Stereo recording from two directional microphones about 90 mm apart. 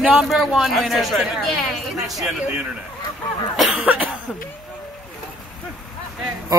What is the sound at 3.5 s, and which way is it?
Cough, 5° right (ahead or behind).